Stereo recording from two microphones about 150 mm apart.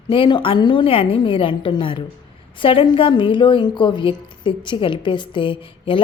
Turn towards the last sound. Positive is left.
turn(degrees=35)  # may be behind; listen again after turning